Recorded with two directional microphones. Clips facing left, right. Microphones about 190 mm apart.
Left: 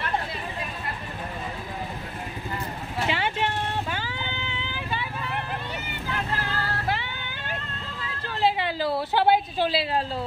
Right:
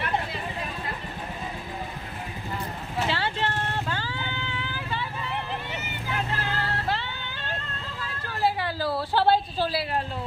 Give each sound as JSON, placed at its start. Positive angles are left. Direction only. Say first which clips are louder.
{"t": 3.1, "sound": "vehicle", "louder": "left 3 dB", "side_deg": 15}
{"t": 6.9, "sound": "music", "louder": "left 1 dB", "side_deg": 15}
{"t": 8.4, "sound": "a sound", "louder": "left 2 dB", "side_deg": 20}